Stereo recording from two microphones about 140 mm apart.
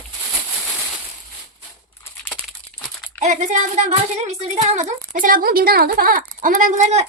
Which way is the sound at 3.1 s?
55° right (ahead or behind).